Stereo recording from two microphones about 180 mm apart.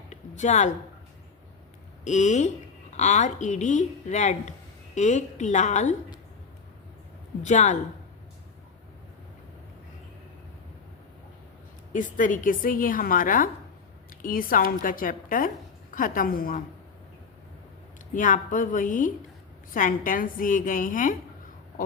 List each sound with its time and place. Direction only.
0.1 s a sound: 40° left (ahead or behind)
2.0 s a woman's voice: 40° left (ahead or behind)
7.4 s a woman's voice: 40° left (ahead or behind)
11.9 s a woman's voice: 45° left (ahead or behind)
18.1 s a woman's voice: 45° left (ahead or behind)